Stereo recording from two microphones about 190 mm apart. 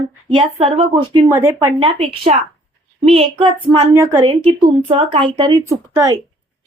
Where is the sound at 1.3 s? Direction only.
15° right (ahead or behind).